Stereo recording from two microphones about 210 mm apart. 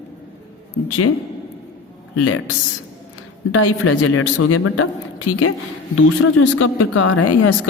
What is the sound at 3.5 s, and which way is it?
A woman's voice, 80° left.